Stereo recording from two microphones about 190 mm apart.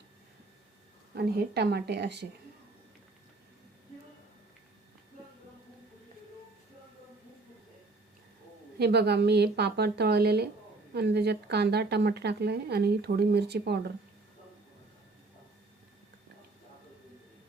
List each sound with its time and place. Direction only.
1.1 s speech: 55° right (ahead or behind)
8.8 s speech: 60° right (ahead or behind)